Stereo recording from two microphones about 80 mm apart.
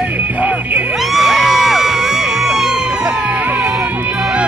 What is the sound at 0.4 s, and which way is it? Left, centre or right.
Music, centre.